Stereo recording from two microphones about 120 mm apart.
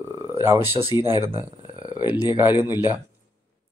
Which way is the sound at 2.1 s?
20° right (ahead or behind).